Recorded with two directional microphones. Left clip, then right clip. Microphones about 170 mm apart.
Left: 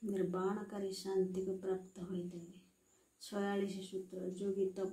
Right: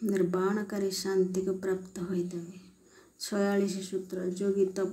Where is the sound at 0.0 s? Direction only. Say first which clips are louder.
Right 9 dB; 20° right (ahead or behind).